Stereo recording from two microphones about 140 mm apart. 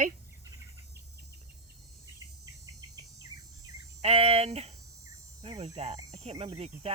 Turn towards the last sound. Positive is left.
turn(degrees=-50)  # may be behind; listen again after turning